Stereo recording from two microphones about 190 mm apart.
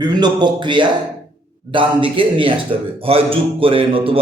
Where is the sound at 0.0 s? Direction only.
20° right (ahead or behind).